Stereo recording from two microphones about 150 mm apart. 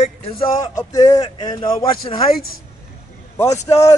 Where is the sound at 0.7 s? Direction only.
25° left (ahead or behind).